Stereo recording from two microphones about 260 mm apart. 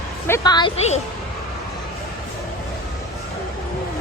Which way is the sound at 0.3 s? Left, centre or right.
Centre.